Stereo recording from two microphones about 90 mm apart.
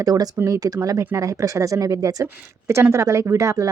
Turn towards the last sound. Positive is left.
turn(degrees=-35)  # may be behind; listen again after turning